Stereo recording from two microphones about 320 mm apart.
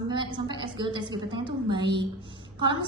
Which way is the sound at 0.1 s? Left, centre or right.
Centre.